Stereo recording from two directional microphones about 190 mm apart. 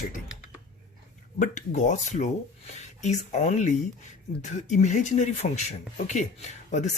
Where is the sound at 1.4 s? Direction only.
40° left (ahead or behind).